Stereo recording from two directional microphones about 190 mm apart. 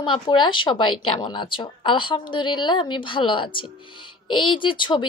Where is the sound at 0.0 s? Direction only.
25° left (ahead or behind).